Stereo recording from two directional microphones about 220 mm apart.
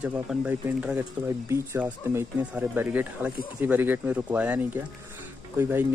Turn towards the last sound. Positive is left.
turn(degrees=-10)  # may be behind; listen again after turning